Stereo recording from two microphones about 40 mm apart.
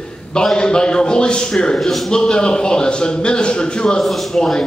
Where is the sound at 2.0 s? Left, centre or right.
Centre.